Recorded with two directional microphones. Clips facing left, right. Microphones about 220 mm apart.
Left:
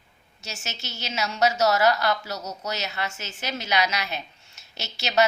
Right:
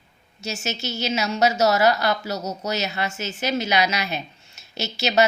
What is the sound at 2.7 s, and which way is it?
A woman's voice, 10° right (ahead or behind).